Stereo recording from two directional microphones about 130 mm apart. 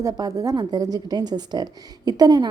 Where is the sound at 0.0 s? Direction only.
25° right (ahead or behind).